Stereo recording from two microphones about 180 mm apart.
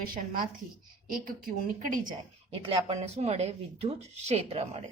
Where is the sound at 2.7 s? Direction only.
35° right (ahead or behind).